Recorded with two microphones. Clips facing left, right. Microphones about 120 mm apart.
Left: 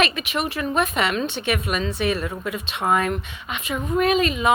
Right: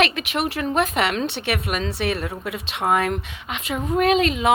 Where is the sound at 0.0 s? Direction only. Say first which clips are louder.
Right 1 dB; 65° right (ahead or behind).